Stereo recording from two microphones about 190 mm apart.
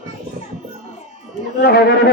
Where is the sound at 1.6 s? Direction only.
55° left (ahead or behind).